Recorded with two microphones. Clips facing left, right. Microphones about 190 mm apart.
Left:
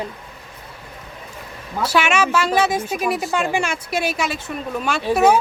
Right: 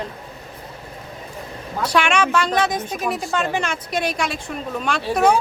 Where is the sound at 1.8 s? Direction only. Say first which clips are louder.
Even; 5° left (ahead or behind).